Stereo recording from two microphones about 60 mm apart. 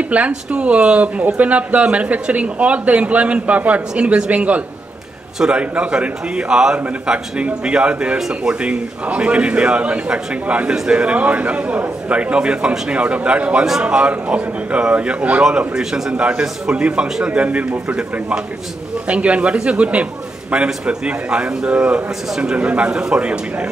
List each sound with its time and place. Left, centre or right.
0.3 s a man's voice: centre
15.7 s a man's voice: centre